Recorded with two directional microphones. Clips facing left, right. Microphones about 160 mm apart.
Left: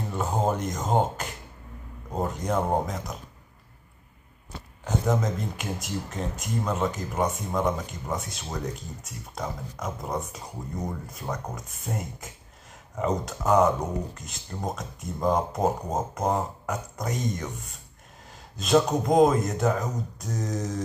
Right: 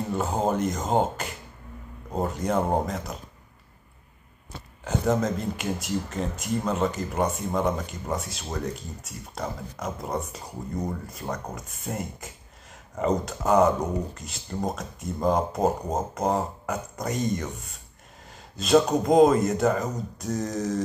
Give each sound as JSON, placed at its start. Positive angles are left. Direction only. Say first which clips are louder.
{"t": 0.1, "sound": "speech", "louder": "even", "side_deg": 0}
{"t": 4.8, "sound": "speech", "louder": "right 2 dB", "side_deg": 0}